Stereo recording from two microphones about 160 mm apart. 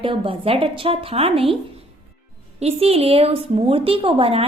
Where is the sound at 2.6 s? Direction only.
40° right (ahead or behind).